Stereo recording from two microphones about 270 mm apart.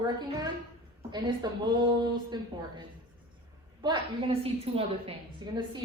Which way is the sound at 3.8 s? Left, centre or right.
Centre.